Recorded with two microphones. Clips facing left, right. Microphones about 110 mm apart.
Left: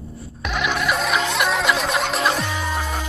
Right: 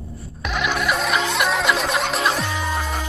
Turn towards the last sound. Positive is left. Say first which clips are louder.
# even
turn(degrees=0)  # may be behind; listen again after turning